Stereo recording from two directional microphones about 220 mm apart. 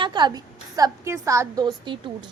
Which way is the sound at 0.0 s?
20° right (ahead or behind).